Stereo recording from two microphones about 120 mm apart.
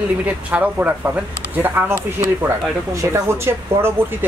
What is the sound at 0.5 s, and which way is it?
Speech, 10° right (ahead or behind).